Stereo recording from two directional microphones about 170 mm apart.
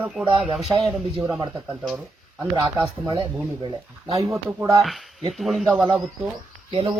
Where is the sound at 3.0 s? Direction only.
30° right (ahead or behind).